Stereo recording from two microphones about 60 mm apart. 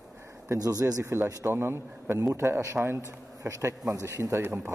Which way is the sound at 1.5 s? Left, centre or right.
Right.